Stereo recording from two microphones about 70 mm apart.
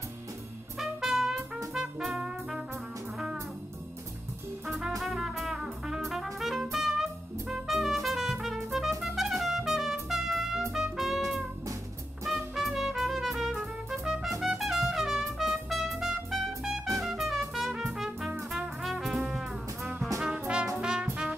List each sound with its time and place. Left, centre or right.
0.7 s trumpet: centre
1.7 s music: centre
4.6 s music: centre
12.5 s music: centre
18.5 s brass instrument: centre
20.2 s brass instrument: centre